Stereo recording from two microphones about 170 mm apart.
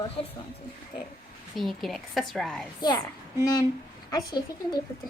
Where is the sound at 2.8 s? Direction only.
25° left (ahead or behind).